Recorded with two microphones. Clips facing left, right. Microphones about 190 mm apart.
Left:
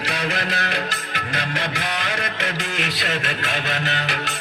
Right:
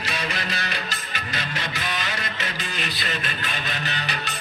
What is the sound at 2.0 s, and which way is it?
A man's voice, 75° left (ahead or behind).